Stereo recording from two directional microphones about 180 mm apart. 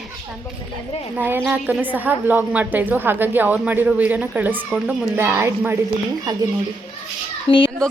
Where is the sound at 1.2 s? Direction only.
10° right (ahead or behind).